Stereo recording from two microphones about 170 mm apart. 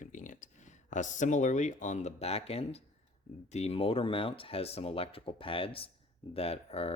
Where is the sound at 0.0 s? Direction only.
50° left (ahead or behind).